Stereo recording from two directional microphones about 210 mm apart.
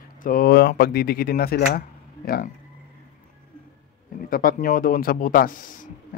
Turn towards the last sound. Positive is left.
turn(degrees=40)  # may be behind; listen again after turning